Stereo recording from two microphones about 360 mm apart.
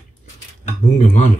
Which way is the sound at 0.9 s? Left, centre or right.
Centre.